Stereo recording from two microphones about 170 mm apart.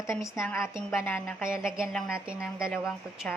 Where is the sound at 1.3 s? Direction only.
5° right (ahead or behind).